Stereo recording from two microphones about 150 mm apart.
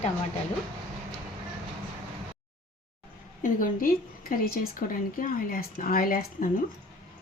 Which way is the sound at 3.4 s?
65° left (ahead or behind).